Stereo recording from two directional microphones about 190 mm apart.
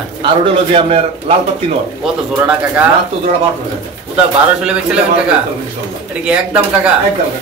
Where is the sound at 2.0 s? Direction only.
5° right (ahead or behind).